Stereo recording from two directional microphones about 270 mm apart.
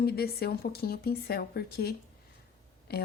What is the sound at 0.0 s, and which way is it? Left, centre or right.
A woman's voice, left.